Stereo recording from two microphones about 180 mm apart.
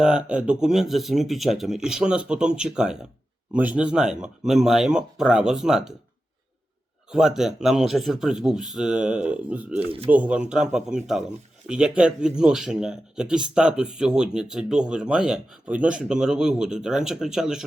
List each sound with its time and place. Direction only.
0.0 s speech: 5° right (ahead or behind)
7.1 s speech: 5° right (ahead or behind)
9.8 s speech: 30° right (ahead or behind)
10.1 s speech: 5° right (ahead or behind)